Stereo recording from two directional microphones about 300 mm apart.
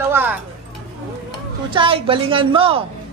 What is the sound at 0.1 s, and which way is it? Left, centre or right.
Tick-tock, centre.